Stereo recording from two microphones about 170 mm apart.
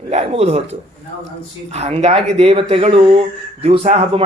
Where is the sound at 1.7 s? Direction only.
40° right (ahead or behind).